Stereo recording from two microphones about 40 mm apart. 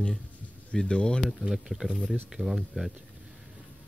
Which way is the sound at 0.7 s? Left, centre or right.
Left.